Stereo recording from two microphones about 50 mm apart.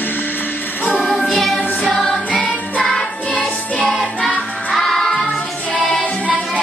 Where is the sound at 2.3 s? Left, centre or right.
Left.